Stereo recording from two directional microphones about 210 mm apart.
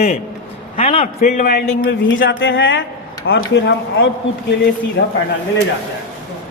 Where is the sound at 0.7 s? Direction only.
30° left (ahead or behind); by 1.9 s 45° left (ahead or behind).